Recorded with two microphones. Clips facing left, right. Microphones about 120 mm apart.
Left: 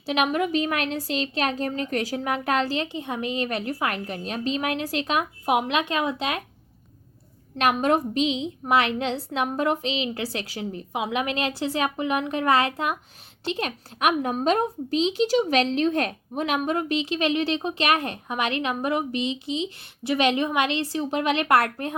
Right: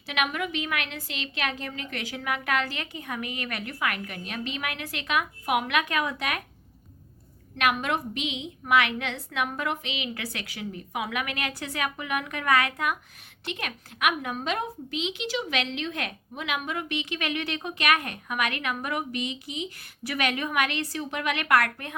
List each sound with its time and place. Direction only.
0.0 s a woman's voice: 30° left (ahead or behind)
7.6 s a woman's voice: 35° left (ahead or behind)